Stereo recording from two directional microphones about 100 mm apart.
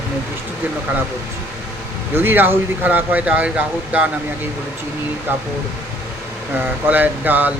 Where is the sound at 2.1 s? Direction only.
20° right (ahead or behind).